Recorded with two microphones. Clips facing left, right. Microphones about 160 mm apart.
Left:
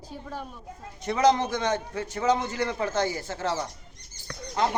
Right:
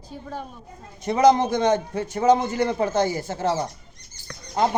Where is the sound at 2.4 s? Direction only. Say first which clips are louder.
Right 6 dB; 50° right (ahead or behind).